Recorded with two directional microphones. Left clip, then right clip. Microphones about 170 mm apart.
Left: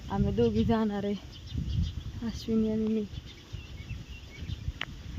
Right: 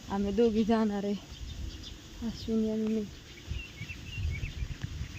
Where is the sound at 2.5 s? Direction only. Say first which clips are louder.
Left 2 dB; 20° left (ahead or behind).